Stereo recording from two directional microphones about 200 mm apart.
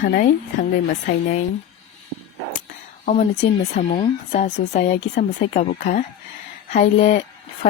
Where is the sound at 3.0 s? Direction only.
35° left (ahead or behind).